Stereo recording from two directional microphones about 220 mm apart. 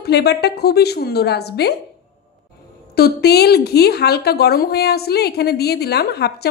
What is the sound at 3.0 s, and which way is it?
A woman's voice, 45° left (ahead or behind).